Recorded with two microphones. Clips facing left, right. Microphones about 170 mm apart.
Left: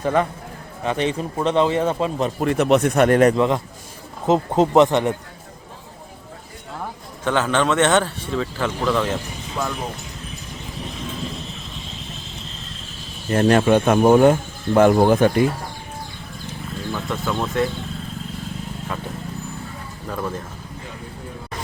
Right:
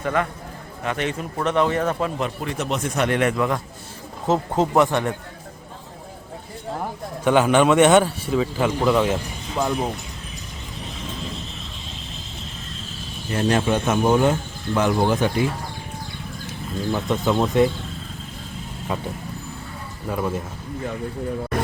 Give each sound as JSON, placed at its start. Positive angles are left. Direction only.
{"t": 0.0, "sound": "speech", "side_deg": 30}
{"t": 2.4, "sound": "a man's voice", "side_deg": 55}
{"t": 3.3, "sound": "speech", "side_deg": 20}
{"t": 7.3, "sound": "speech", "side_deg": -15}
{"t": 13.3, "sound": "speech", "side_deg": 60}
{"t": 16.9, "sound": "speech", "side_deg": -20}
{"t": 18.9, "sound": "speech", "side_deg": -15}
{"t": 20.1, "sound": "speech", "side_deg": -10}